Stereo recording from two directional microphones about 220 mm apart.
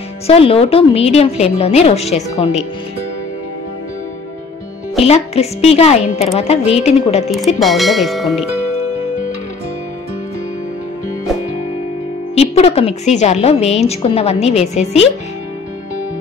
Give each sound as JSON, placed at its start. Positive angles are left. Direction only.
{"t": 0.3, "sound": "a woman's voice", "side_deg": 25}
{"t": 5.0, "sound": "a woman's voice", "side_deg": 30}
{"t": 7.2, "sound": "speech", "side_deg": 0}
{"t": 12.4, "sound": "a woman's voice", "side_deg": 25}